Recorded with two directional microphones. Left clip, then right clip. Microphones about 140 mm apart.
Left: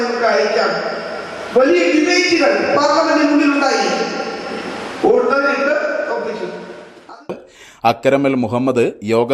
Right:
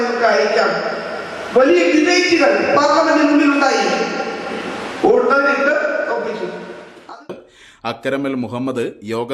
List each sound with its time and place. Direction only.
0.0 s a man's voice: centre (ahead or behind)
7.8 s a man's voice: 40° left (ahead or behind)
8.4 s speech: 25° left (ahead or behind)